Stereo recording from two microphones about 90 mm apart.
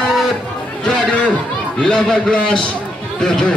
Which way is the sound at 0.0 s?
Centre (ahead or behind).